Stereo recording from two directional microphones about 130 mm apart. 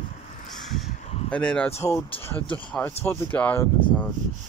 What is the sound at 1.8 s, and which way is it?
Speech, 20° left (ahead or behind).